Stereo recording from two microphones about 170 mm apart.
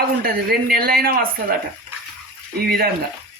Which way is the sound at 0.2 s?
60° right (ahead or behind).